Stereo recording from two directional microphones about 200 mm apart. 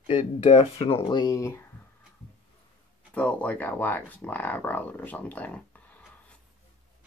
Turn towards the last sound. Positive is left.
turn(degrees=5)  # may be behind; listen again after turning